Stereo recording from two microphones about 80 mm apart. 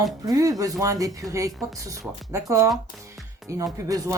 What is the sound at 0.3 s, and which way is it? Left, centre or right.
A woman's voice, right.